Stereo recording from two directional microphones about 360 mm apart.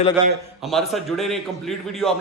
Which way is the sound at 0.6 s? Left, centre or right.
Centre.